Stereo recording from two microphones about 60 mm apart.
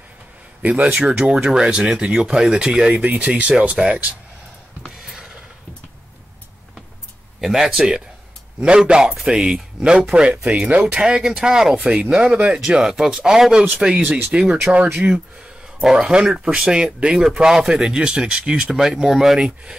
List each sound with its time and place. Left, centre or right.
0.6 s speech: right
4.8 s a sound: centre
7.3 s speech: centre
15.8 s speech: centre
16.2 s speech: centre